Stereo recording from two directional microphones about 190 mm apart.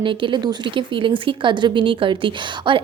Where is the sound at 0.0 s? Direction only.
25° right (ahead or behind).